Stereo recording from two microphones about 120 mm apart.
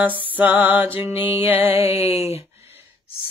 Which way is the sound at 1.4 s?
60° left (ahead or behind).